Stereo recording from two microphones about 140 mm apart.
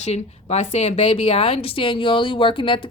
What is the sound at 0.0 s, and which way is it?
A woman's voice, 50° left (ahead or behind).